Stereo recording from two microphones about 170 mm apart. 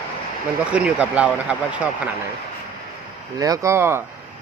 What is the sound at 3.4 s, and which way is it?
Speech, 20° right (ahead or behind).